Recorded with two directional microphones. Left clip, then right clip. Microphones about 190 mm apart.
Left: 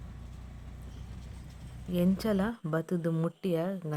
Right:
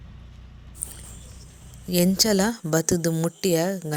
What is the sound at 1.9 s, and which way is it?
Speech, 25° right (ahead or behind).